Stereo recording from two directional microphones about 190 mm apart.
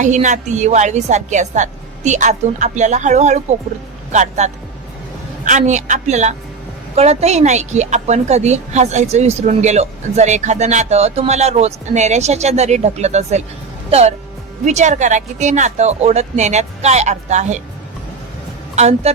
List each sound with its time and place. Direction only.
0.0 s a woman's voice: 40° right (ahead or behind)
14.6 s a woman's voice: 35° right (ahead or behind)
18.8 s a woman's voice: 35° right (ahead or behind)